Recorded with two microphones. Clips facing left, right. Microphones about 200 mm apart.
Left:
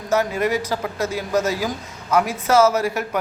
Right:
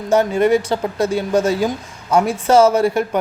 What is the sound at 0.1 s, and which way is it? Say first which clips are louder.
A man's voice: right 6 dB; 30° right (ahead or behind).